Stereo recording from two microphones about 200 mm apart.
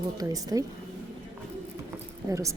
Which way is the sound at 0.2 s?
20° right (ahead or behind).